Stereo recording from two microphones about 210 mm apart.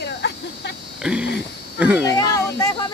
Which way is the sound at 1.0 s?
5° right (ahead or behind).